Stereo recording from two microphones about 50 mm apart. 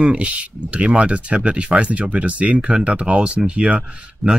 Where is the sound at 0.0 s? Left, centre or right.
Right.